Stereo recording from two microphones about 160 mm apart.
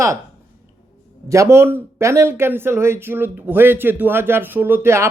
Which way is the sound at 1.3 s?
15° right (ahead or behind).